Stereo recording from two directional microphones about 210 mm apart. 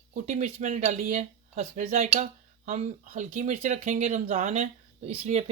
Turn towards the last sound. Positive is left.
turn(degrees=-30)  # may be behind; listen again after turning